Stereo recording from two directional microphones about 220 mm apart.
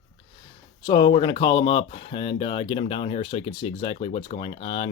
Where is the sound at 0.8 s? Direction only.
20° left (ahead or behind).